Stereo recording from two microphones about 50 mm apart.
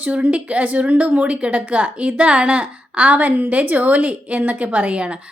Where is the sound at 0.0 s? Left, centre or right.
Right.